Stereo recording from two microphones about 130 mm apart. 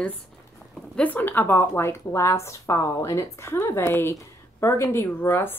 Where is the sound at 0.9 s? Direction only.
10° left (ahead or behind).